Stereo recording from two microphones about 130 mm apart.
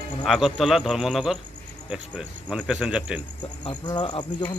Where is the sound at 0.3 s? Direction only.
Centre (ahead or behind).